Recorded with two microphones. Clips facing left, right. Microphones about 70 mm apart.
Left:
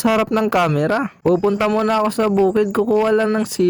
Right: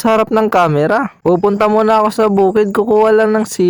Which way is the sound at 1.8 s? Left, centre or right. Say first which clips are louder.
Right 6 dB; right.